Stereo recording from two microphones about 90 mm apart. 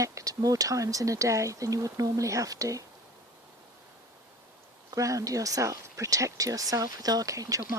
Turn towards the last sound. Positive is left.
turn(degrees=-40)  # may be behind; listen again after turning